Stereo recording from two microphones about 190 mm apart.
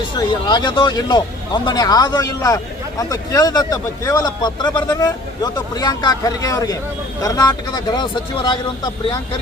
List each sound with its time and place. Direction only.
0.2 s speech: 25° left (ahead or behind)